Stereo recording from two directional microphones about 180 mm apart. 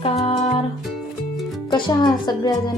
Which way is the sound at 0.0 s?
30° left (ahead or behind).